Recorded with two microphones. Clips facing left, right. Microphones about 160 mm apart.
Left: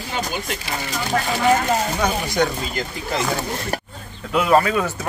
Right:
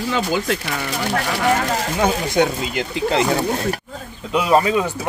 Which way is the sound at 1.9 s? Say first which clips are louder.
Right 3 dB; 25° right (ahead or behind).